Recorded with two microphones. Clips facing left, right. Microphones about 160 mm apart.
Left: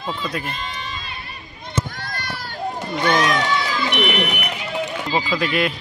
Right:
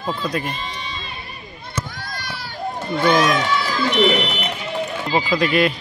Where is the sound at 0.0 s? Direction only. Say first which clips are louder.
Right 2 dB; 5° right (ahead or behind).